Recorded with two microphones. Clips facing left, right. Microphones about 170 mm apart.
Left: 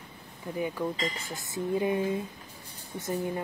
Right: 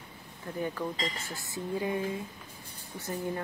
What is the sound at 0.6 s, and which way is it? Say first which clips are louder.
Speech: left 2 dB; 10° left (ahead or behind).